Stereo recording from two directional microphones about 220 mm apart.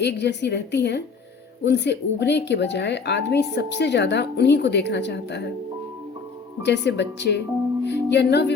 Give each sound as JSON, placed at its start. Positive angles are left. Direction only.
{"t": 0.0, "sound": "a woman's voice", "side_deg": 50}
{"t": 6.6, "sound": "a woman's voice", "side_deg": 50}